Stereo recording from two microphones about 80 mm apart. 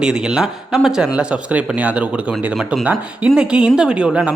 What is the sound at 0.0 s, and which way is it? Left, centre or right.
Speech, centre.